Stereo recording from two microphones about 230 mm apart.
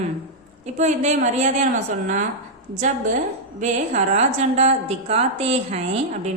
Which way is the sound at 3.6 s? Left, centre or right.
Right.